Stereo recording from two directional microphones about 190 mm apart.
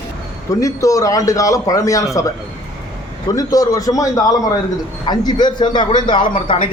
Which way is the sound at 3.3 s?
20° left (ahead or behind).